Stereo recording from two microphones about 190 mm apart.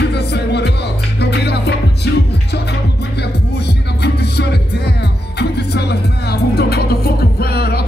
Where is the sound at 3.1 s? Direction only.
60° left (ahead or behind).